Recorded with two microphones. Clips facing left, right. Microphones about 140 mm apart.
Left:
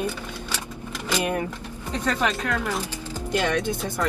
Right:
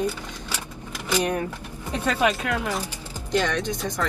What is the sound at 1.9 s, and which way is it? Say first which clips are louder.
Speech: right 2 dB; 15° right (ahead or behind).